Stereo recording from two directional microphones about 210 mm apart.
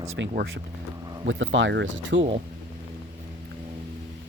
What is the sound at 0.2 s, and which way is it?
Speech, 50° right (ahead or behind).